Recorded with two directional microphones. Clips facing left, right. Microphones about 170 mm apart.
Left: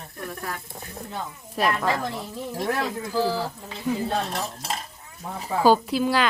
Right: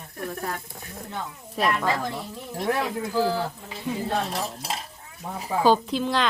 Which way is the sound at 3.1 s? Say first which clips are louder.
Even; centre (ahead or behind).